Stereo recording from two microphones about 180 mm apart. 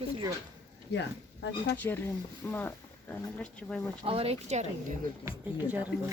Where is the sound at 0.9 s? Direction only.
75° left (ahead or behind).